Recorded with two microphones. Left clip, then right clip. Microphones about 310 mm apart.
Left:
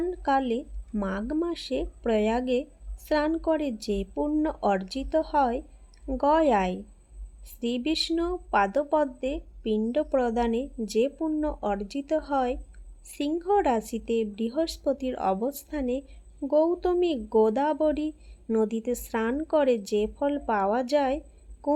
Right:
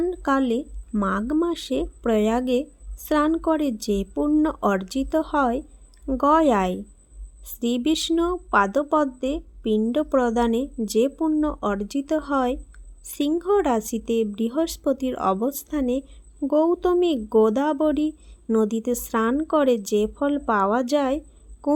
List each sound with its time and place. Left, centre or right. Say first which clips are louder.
0.2 s a woman's voice: right 3 dB; right
11.8 s speech: right 6 dB; right
12.1 s speech: right 3 dB; right